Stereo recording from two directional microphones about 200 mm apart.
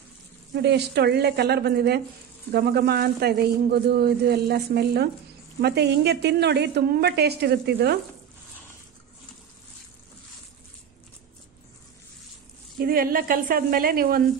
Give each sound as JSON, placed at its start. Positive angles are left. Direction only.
{"t": 0.6, "sound": "a woman's voice", "side_deg": -55}
{"t": 12.7, "sound": "a man's voice", "side_deg": -45}